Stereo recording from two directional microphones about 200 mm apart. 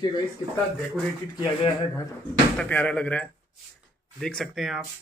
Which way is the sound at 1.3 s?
20° left (ahead or behind).